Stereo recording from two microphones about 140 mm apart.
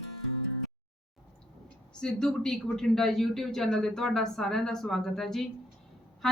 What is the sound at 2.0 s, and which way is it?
A woman's voice, 5° left (ahead or behind).